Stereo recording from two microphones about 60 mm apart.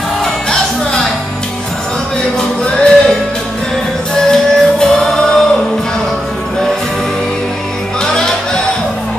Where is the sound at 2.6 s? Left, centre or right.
Centre.